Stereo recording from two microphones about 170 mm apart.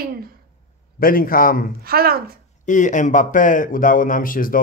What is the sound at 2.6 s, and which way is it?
Speech, 45° left (ahead or behind).